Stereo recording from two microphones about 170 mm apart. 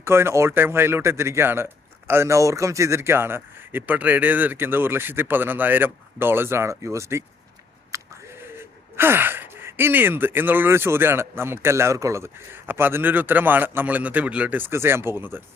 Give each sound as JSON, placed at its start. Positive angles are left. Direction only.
{"t": 0.0, "sound": "speech", "side_deg": -15}
{"t": 7.9, "sound": "a sound", "side_deg": -20}
{"t": 8.5, "sound": "speech", "side_deg": -15}